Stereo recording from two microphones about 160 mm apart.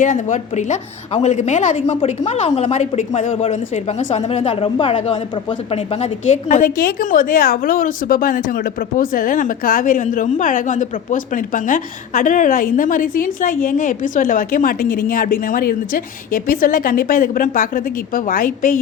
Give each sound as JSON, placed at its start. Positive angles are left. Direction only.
{"t": 0.0, "sound": "a woman's voice", "side_deg": 50}